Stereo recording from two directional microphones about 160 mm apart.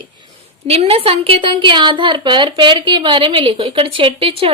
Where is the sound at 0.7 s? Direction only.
40° right (ahead or behind).